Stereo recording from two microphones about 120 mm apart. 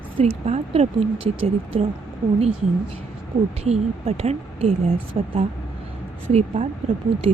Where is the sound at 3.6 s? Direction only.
65° right (ahead or behind).